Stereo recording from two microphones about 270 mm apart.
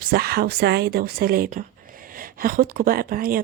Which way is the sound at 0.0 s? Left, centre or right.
Right.